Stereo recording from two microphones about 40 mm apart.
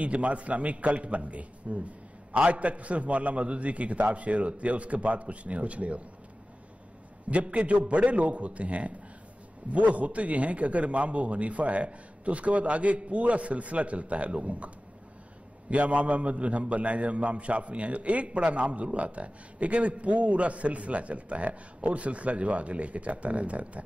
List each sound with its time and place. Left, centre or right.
0.0 s a man's voice: right
7.2 s a man's voice: right
15.7 s a man's voice: right